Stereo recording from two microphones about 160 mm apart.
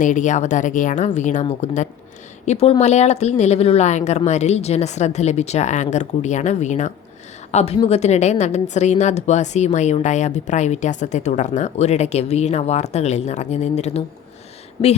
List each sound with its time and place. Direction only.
0.0 s a woman's voice: 50° left (ahead or behind)